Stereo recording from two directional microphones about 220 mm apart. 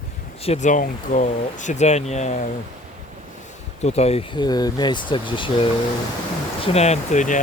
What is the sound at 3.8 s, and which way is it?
Speech, 30° left (ahead or behind).